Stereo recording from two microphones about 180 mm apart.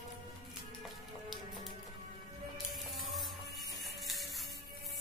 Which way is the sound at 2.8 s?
Centre (ahead or behind).